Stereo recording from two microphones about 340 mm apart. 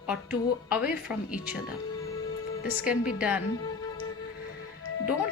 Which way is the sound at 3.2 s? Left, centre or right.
Centre.